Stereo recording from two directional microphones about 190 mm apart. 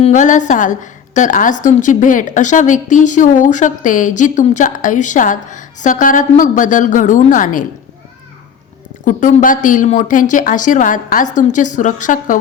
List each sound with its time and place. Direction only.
0.0 s a woman's voice: 40° left (ahead or behind)
9.0 s speech: 45° left (ahead or behind)